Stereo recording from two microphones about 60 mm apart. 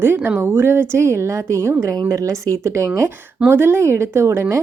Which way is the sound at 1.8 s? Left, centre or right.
Right.